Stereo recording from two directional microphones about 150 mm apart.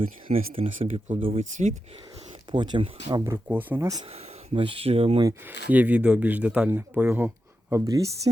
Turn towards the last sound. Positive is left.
turn(degrees=-20)  # may be behind; listen again after turning